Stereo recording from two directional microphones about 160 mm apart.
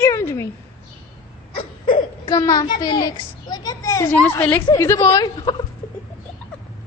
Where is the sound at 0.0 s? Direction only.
15° left (ahead or behind).